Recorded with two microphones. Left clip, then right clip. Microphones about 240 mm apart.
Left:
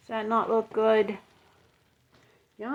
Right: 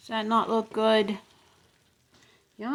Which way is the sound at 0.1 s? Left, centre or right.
Right.